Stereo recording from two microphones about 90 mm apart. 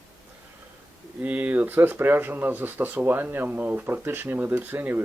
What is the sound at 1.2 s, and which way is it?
Speech, 20° right (ahead or behind).